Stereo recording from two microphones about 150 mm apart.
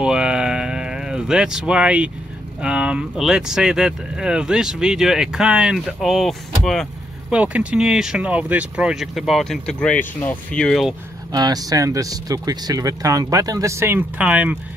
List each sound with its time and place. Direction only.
0.0 s a sound: 5° right (ahead or behind)
2.6 s speech: 5° right (ahead or behind)
11.3 s speech: 25° right (ahead or behind); by 14.6 s 10° right (ahead or behind)